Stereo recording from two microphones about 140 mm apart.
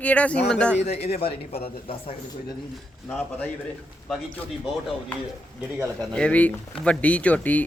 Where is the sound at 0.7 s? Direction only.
50° left (ahead or behind).